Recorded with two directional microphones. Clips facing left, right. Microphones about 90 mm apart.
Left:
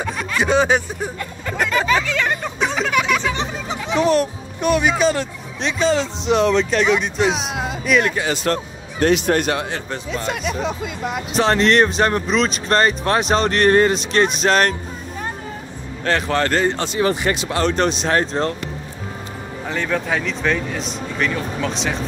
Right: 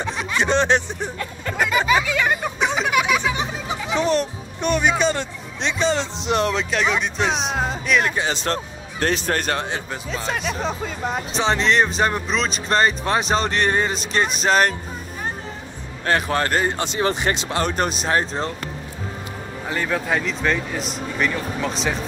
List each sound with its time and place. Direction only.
0.0 s a sound: centre (ahead or behind)
7.8 s speech: centre (ahead or behind)
8.1 s speech: 25° right (ahead or behind)
9.0 s speech: 40° right (ahead or behind)
9.8 s speech: centre (ahead or behind)
11.3 s speech: centre (ahead or behind)
16.1 s speech: 15° right (ahead or behind)
17.6 s speech: 5° right (ahead or behind)
19.7 s speech: 5° right (ahead or behind)